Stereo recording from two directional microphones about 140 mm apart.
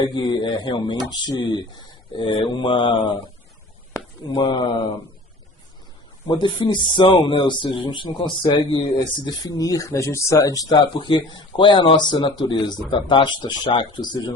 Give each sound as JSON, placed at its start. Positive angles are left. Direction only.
{"t": 0.0, "sound": "speech", "side_deg": 30}
{"t": 3.9, "sound": "a sound", "side_deg": 25}
{"t": 6.2, "sound": "speech", "side_deg": 30}